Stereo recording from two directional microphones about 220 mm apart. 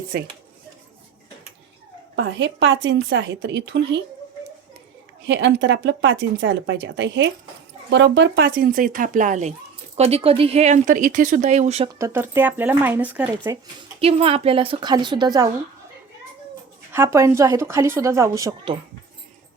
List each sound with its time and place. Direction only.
0.1 s speech: 45° right (ahead or behind)
2.1 s speech: 55° right (ahead or behind)
5.2 s speech: 55° right (ahead or behind); by 11.9 s 30° right (ahead or behind)
11.9 s a woman's voice: 10° right (ahead or behind)
14.0 s a woman's voice: 25° right (ahead or behind)
16.9 s a woman's voice: 10° right (ahead or behind)